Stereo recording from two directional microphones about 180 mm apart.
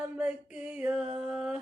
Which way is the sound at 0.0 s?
5° right (ahead or behind).